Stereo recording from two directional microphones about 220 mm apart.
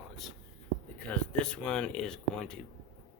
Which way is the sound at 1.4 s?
5° left (ahead or behind).